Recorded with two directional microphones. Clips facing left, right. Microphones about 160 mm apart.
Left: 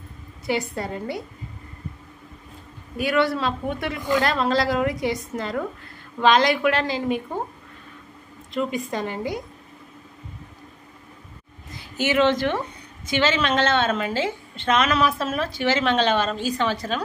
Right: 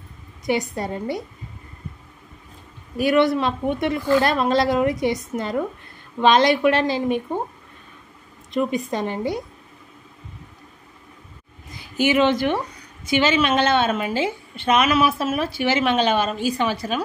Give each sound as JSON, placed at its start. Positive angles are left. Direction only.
{"t": 0.5, "sound": "a woman's voice", "side_deg": -20}
{"t": 3.0, "sound": "a woman's voice", "side_deg": -20}
{"t": 8.5, "sound": "a woman's voice", "side_deg": -20}
{"t": 11.7, "sound": "a woman's voice", "side_deg": -15}